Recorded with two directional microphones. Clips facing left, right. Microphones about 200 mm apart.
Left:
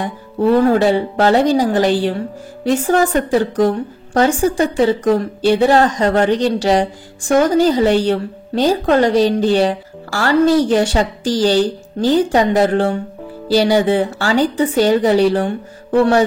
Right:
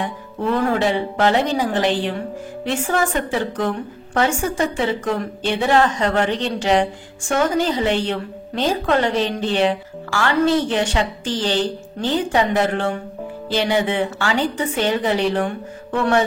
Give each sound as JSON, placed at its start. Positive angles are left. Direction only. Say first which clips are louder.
{"t": 0.0, "sound": "a woman's voice", "louder": "left 7 dB", "side_deg": 35}